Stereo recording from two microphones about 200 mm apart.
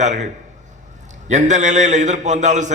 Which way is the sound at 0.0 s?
35° right (ahead or behind).